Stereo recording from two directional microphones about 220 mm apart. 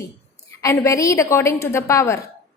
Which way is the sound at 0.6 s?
15° left (ahead or behind).